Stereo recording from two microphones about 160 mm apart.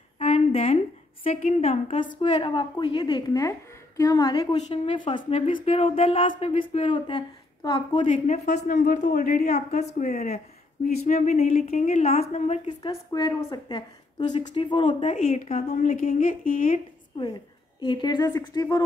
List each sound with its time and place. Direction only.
0.2 s a sound: 40° left (ahead or behind)
1.2 s a woman's voice: 40° left (ahead or behind)
8.3 s a woman's voice: 50° left (ahead or behind)
12.8 s a woman's voice: 25° left (ahead or behind)
15.1 s a woman's voice: 45° left (ahead or behind)
17.7 s a woman's voice: 30° left (ahead or behind)